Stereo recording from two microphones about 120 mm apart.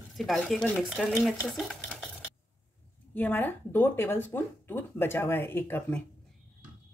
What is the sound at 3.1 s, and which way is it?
Speech, 15° left (ahead or behind).